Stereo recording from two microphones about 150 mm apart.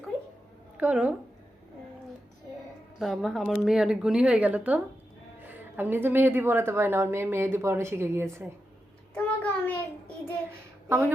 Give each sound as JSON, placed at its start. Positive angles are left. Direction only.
{"t": 0.8, "sound": "a woman's voice", "side_deg": -5}
{"t": 3.0, "sound": "a woman's voice", "side_deg": 0}
{"t": 9.1, "sound": "child singing", "side_deg": 10}
{"t": 10.8, "sound": "speech", "side_deg": -15}